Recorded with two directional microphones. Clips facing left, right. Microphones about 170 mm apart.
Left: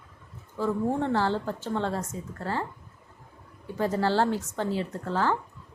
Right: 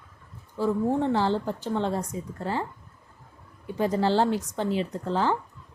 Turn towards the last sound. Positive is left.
turn(degrees=-20)  # may be behind; listen again after turning